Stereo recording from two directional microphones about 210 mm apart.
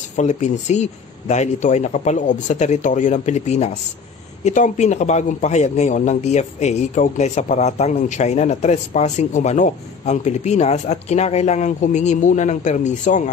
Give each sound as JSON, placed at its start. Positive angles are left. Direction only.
{"t": 0.1, "sound": "a man's voice", "side_deg": 35}